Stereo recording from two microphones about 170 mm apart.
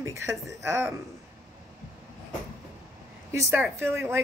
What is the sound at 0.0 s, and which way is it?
Speech, 15° right (ahead or behind).